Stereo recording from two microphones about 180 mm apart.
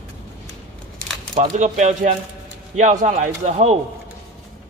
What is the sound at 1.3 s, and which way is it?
A man's voice, 40° right (ahead or behind).